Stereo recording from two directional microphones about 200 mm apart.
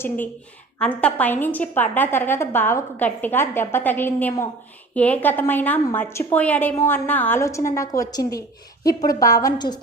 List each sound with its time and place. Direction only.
0.8 s a woman's voice: 5° left (ahead or behind)